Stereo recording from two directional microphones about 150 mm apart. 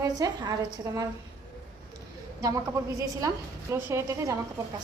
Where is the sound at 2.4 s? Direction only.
20° right (ahead or behind).